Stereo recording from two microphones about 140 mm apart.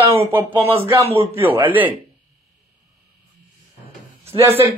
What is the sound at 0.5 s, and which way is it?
Speech, 40° right (ahead or behind).